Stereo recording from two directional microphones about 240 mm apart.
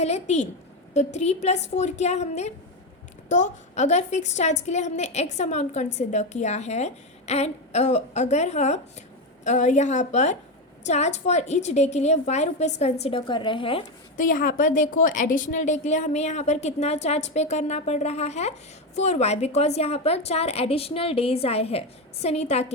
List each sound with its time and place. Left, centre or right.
0.0 s a woman's voice: left
14.2 s a woman's voice: left